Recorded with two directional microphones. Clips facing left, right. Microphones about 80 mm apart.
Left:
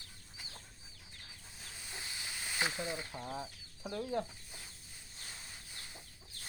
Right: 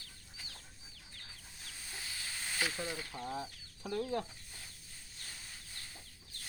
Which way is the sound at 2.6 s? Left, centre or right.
Left.